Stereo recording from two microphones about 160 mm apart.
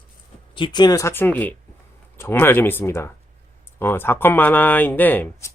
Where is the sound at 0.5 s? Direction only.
30° left (ahead or behind).